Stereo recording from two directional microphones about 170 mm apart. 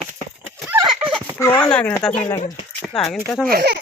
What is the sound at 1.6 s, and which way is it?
Speech, 5° left (ahead or behind).